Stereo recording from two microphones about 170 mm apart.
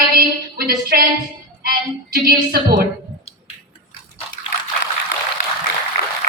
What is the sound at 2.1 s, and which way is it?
Speech, 65° right (ahead or behind).